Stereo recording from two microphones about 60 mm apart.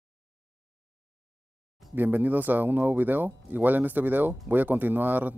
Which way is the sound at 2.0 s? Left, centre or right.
Right.